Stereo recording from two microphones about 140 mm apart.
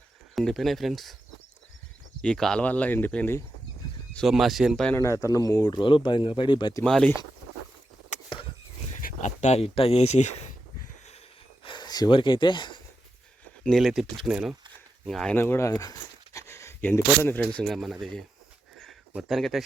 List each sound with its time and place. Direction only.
0.3 s speech: centre (ahead or behind)
2.2 s speech: 5° left (ahead or behind)
4.1 s speech: centre (ahead or behind)
4.9 s speech: 20° left (ahead or behind)
6.8 s speech: 5° left (ahead or behind)
9.0 s speech: 70° left (ahead or behind)
11.6 s a sound: 35° left (ahead or behind)
13.7 s speech: centre (ahead or behind)
15.4 s a sound: 15° left (ahead or behind)
17.5 s speech: 5° left (ahead or behind)
18.8 s a sound: centre (ahead or behind)